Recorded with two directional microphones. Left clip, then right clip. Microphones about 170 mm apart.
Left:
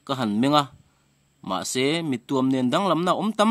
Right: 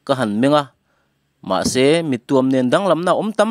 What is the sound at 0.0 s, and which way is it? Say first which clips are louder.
A man's voice: right 7 dB; 35° right (ahead or behind).